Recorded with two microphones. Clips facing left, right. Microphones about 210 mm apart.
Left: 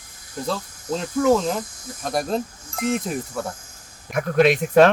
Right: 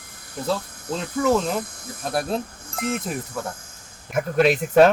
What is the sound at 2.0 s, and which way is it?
Speech, 5° right (ahead or behind).